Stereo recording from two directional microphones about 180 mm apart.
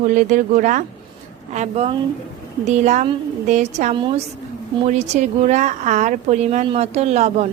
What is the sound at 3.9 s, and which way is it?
Speech, 25° right (ahead or behind).